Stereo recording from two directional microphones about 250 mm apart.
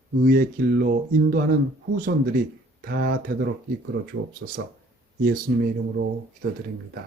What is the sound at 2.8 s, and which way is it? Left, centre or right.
Speech, right.